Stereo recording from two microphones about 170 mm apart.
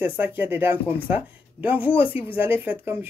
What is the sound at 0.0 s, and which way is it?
Speech, 10° right (ahead or behind).